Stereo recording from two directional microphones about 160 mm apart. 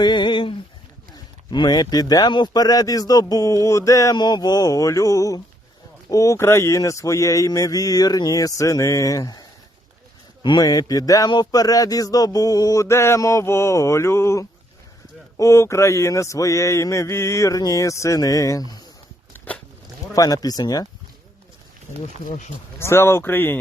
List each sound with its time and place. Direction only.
0.0 s a sound: 30° left (ahead or behind)
1.5 s speech: 30° left (ahead or behind)
19.3 s biting: 10° left (ahead or behind)
20.1 s speech: 20° left (ahead or behind)
22.0 s speech: 50° left (ahead or behind)
22.8 s speech: 15° left (ahead or behind)